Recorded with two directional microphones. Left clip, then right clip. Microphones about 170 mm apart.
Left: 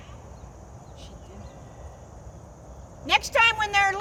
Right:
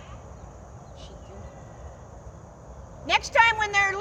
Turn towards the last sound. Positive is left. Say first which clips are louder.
# left 1 dB
turn(degrees=60)  # may be behind; listen again after turning